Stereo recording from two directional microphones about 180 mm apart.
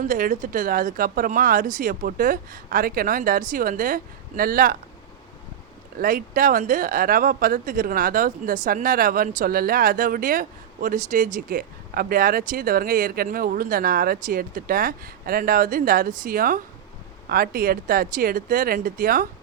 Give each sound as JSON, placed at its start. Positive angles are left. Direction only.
{"t": 0.0, "sound": "speech", "side_deg": -45}
{"t": 6.0, "sound": "speech", "side_deg": -50}